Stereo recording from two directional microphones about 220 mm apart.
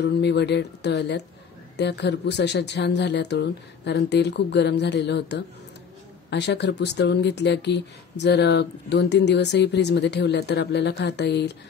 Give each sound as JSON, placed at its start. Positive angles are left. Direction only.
{"t": 0.0, "sound": "speech", "side_deg": 50}